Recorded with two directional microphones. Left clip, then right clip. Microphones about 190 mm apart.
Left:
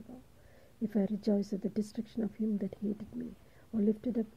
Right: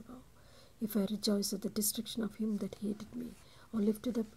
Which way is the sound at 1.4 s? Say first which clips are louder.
Left 1 dB; 15° left (ahead or behind).